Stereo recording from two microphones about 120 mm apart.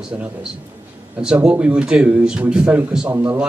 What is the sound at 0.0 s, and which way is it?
A man's voice, 10° right (ahead or behind).